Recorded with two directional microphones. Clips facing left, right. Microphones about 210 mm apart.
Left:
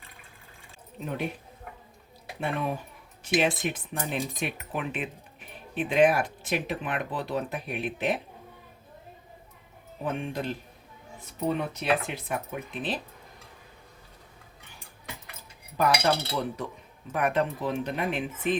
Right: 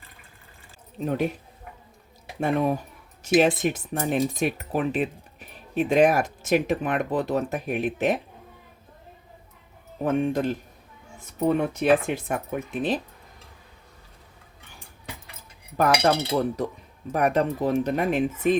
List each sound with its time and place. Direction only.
0.9 s speech: 40° right (ahead or behind)
2.4 s speech: 40° right (ahead or behind)
10.0 s speech: 45° right (ahead or behind)
15.8 s speech: 50° right (ahead or behind)